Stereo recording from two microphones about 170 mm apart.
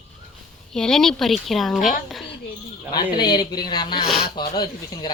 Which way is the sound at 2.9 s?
25° left (ahead or behind).